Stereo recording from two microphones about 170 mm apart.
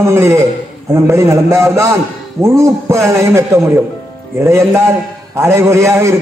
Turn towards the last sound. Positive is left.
turn(degrees=-15)  # may be behind; listen again after turning